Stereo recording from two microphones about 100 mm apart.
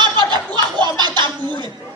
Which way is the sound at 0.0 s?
50° right (ahead or behind).